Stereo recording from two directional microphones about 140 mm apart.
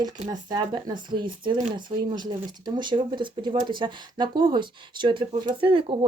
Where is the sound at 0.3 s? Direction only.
30° right (ahead or behind).